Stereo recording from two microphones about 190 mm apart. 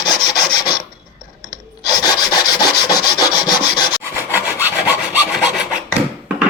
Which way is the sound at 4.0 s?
10° right (ahead or behind).